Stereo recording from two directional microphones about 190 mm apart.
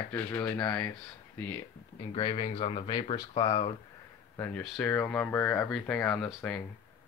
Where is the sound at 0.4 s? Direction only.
25° left (ahead or behind).